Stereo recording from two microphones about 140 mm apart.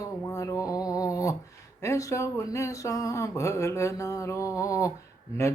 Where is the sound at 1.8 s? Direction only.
20° left (ahead or behind).